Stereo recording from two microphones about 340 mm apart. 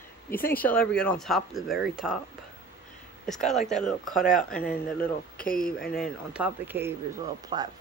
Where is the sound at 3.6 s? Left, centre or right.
Centre.